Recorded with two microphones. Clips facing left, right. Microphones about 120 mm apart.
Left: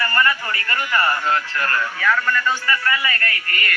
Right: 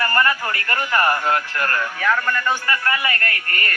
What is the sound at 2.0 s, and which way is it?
Speech, 25° right (ahead or behind).